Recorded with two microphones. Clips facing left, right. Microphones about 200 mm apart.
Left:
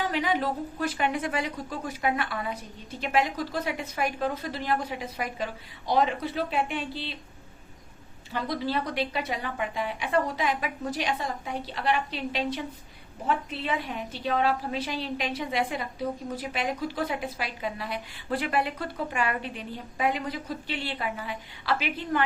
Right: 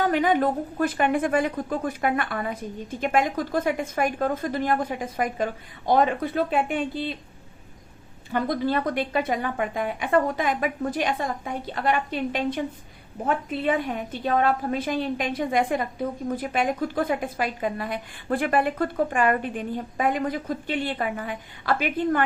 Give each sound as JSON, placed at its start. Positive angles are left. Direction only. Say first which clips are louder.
{"t": 0.0, "sound": "a woman's voice", "louder": "right 6 dB", "side_deg": -50}
{"t": 8.3, "sound": "a woman's voice", "louder": "right 5 dB", "side_deg": -50}